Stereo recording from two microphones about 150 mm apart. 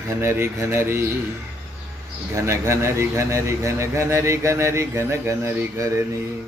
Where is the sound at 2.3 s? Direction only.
20° right (ahead or behind).